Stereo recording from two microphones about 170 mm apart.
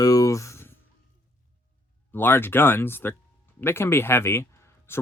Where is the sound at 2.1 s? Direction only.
10° left (ahead or behind).